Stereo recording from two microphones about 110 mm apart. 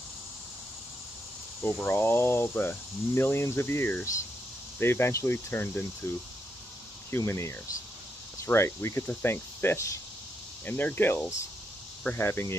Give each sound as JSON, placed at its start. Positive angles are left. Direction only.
{"t": 1.6, "sound": "speech", "side_deg": 25}